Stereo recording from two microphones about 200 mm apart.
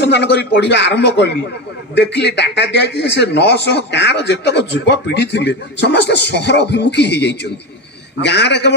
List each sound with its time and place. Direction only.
0.0 s speech: 60° left (ahead or behind)